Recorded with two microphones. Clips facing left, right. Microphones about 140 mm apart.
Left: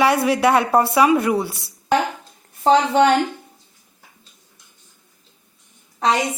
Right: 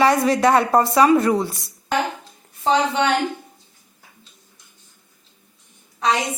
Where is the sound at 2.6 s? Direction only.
45° left (ahead or behind).